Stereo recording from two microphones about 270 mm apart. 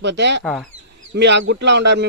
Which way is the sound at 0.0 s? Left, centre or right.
Right.